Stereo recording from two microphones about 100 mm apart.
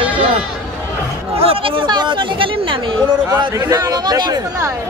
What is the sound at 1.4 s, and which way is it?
Speech, 70° right (ahead or behind).